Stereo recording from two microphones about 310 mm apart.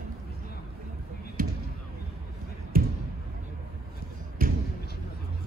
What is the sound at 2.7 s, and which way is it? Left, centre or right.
Basketball bounce, right.